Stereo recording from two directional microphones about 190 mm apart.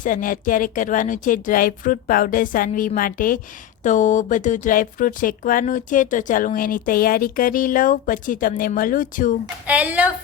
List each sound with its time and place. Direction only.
0.0 s speech: 45° left (ahead or behind)
9.6 s a woman's voice: 5° right (ahead or behind)